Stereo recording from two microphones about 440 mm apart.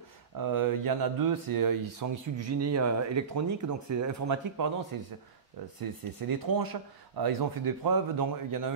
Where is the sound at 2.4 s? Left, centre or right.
Right.